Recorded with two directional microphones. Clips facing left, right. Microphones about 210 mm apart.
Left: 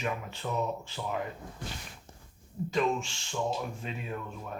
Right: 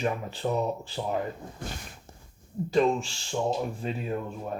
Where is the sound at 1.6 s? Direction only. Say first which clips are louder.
Right 4 dB; 50° right (ahead or behind).